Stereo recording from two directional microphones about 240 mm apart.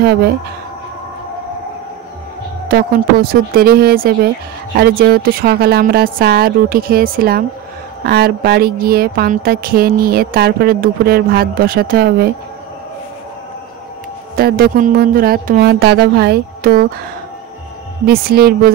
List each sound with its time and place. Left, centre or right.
2.7 s speech: right
14.3 s speech: right
18.0 s speech: right